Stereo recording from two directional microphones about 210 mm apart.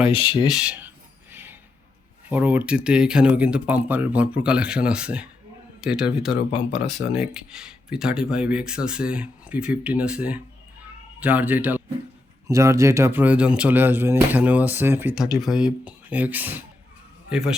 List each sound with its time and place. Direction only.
0.1 s speech: 25° left (ahead or behind)
0.5 s a sound: 5° right (ahead or behind)
2.3 s a man's voice: 10° right (ahead or behind)